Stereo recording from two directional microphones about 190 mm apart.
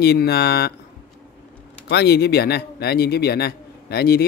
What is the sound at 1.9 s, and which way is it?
A man's voice, 60° left (ahead or behind).